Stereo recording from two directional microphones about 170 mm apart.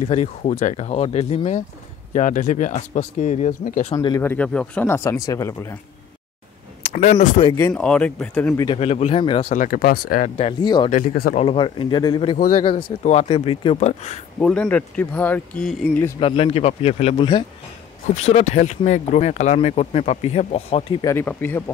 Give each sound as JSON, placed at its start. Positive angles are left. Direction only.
{"t": 0.0, "sound": "speech", "side_deg": 40}
{"t": 3.9, "sound": "speech", "side_deg": 20}
{"t": 6.8, "sound": "speech", "side_deg": 40}
{"t": 7.5, "sound": "speech", "side_deg": 10}
{"t": 8.7, "sound": "speech", "side_deg": 35}
{"t": 9.5, "sound": "speech", "side_deg": 50}
{"t": 10.6, "sound": "speech", "side_deg": 25}
{"t": 10.9, "sound": "speech", "side_deg": 55}
{"t": 11.3, "sound": "speech", "side_deg": 30}
{"t": 14.4, "sound": "speech", "side_deg": 5}
{"t": 16.2, "sound": "speech", "side_deg": 35}
{"t": 21.0, "sound": "speech", "side_deg": 15}